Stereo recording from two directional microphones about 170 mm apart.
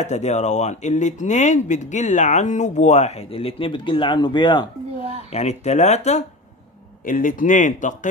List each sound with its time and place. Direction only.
0.0 s speech: 40° left (ahead or behind); by 4.6 s 25° left (ahead or behind)
5.3 s speech: 40° left (ahead or behind)
7.1 s speech: 50° left (ahead or behind)